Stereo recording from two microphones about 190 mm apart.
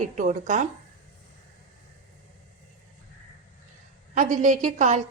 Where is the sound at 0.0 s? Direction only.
40° right (ahead or behind).